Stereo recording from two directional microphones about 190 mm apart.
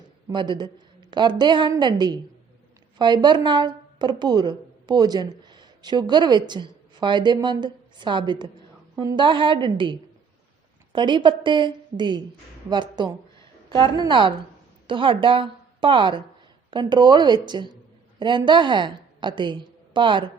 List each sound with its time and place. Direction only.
0.3 s a woman's voice: 25° right (ahead or behind)